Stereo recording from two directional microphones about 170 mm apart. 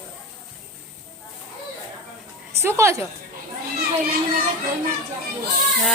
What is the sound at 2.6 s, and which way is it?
Speech, 15° right (ahead or behind).